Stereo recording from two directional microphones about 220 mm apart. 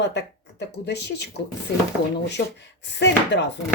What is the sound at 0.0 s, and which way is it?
Speech, 50° left (ahead or behind).